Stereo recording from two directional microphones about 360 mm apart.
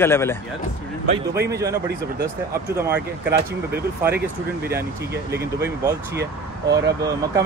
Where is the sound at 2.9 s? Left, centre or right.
Right.